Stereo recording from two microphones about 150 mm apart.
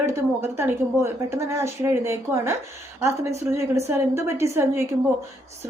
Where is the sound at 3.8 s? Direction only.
15° right (ahead or behind).